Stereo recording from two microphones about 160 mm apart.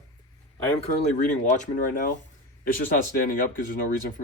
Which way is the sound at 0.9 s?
55° left (ahead or behind).